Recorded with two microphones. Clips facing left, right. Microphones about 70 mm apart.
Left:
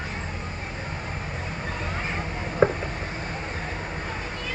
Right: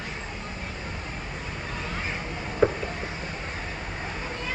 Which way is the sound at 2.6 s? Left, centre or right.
Left.